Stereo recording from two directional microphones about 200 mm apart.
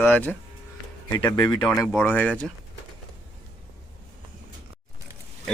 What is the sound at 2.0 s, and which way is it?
Speech, 10° left (ahead or behind).